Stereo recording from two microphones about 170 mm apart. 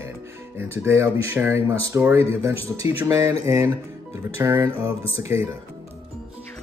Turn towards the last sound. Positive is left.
turn(degrees=-15)  # may be behind; listen again after turning